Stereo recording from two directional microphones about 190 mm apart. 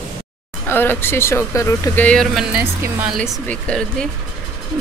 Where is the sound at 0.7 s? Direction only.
10° left (ahead or behind); by 3.1 s 10° right (ahead or behind).